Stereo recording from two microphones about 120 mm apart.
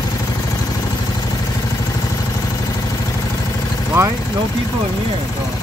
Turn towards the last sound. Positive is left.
turn(degrees=-20)  # may be behind; listen again after turning